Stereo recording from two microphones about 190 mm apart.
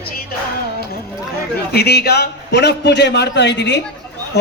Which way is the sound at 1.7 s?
55° left (ahead or behind).